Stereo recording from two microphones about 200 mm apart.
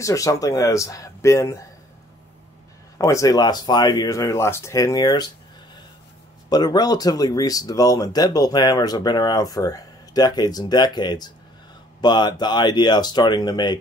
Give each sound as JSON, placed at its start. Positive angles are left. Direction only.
{"t": 0.0, "sound": "speech", "side_deg": 15}
{"t": 3.0, "sound": "speech", "side_deg": 15}
{"t": 6.5, "sound": "speech", "side_deg": 20}